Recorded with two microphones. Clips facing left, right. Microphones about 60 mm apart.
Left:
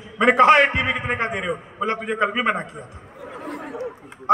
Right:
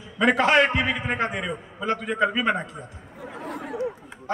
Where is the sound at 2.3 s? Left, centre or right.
Left.